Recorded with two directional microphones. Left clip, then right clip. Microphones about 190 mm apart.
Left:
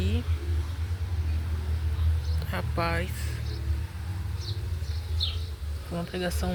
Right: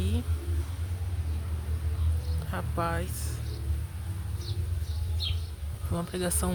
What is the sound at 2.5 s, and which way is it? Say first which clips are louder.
Speech: left 2 dB; 5° right (ahead or behind).